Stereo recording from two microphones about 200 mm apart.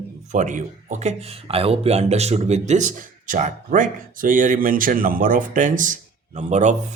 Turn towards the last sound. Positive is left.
turn(degrees=-35)  # may be behind; listen again after turning